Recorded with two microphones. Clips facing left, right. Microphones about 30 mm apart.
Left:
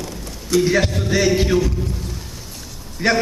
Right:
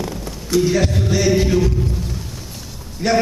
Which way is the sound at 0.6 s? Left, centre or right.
Centre.